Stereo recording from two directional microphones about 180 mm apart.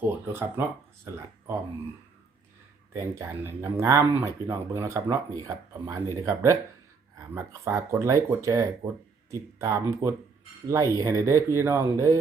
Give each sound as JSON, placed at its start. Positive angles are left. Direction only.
{"t": 0.1, "sound": "speech", "side_deg": -10}
{"t": 2.9, "sound": "speech", "side_deg": -15}